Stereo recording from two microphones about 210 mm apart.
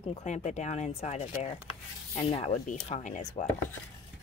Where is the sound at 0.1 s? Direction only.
35° left (ahead or behind).